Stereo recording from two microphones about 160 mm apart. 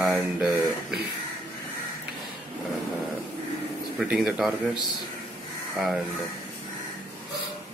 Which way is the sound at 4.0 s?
5° right (ahead or behind).